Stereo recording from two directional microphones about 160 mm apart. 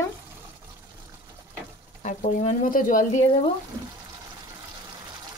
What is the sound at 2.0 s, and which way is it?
Speech, 45° left (ahead or behind).